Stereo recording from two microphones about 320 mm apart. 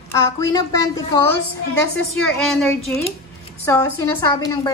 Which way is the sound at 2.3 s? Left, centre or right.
Centre.